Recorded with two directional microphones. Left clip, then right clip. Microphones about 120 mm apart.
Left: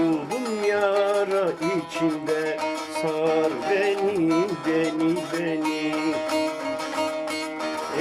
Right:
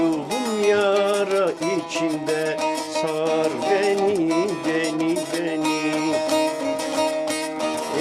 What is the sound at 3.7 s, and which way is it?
Music, 10° left (ahead or behind).